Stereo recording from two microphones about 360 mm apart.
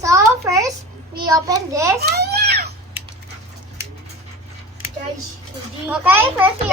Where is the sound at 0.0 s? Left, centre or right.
Centre.